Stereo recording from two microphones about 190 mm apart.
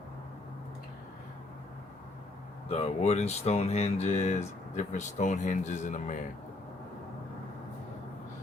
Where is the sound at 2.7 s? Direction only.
35° left (ahead or behind).